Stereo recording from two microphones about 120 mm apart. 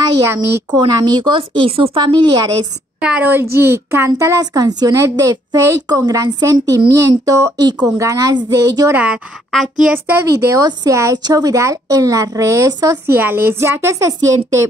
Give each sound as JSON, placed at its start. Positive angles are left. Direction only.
{"t": 0.7, "sound": "speech", "side_deg": -35}
{"t": 3.0, "sound": "a woman's voice", "side_deg": -10}
{"t": 8.9, "sound": "a woman's voice", "side_deg": -10}